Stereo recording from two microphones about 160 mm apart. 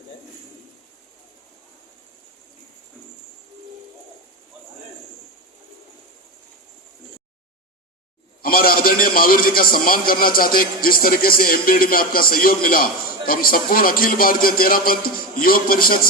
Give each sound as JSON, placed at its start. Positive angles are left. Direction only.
{"t": 8.4, "sound": "a man's voice", "side_deg": 65}